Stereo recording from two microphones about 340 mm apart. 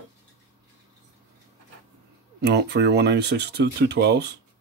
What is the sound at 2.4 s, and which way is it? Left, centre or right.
Speech, right.